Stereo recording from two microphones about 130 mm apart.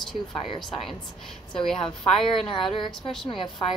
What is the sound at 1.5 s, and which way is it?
A woman's voice, 40° left (ahead or behind).